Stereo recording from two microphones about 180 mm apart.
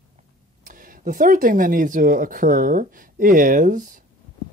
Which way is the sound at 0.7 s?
50° right (ahead or behind).